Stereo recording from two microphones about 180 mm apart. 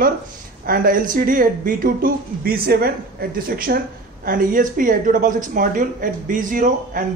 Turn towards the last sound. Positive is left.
turn(degrees=-45)  # may be behind; listen again after turning